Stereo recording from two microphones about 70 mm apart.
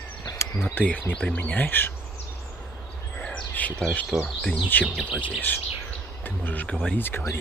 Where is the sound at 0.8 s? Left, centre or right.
Left.